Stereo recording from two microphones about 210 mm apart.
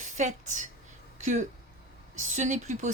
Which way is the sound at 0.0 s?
35° right (ahead or behind).